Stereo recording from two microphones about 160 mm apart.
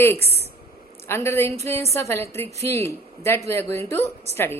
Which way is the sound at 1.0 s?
15° left (ahead or behind).